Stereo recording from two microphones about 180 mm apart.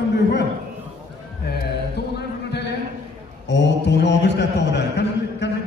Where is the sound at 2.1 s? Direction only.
65° left (ahead or behind).